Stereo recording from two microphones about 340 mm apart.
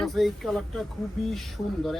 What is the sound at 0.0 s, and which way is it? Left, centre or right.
Speech, centre.